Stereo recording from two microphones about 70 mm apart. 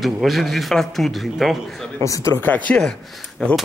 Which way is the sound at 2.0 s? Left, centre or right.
Left.